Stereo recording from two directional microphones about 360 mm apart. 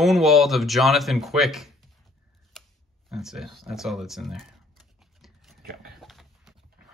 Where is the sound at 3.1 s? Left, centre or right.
Centre.